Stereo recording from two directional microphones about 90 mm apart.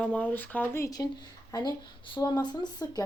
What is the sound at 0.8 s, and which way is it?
Speech, 40° left (ahead or behind).